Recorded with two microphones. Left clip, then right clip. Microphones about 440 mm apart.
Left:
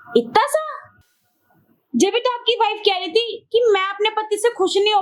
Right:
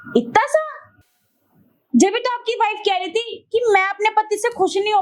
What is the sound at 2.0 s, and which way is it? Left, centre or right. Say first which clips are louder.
A woman's voice: right 1 dB; centre.